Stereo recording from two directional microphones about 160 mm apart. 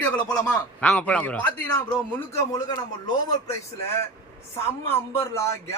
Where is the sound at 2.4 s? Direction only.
25° left (ahead or behind).